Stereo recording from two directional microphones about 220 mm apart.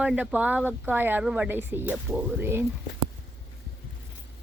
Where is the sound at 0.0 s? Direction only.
5° right (ahead or behind).